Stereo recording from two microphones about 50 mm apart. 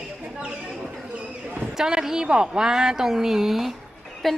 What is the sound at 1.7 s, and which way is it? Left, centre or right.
A woman's voice, centre.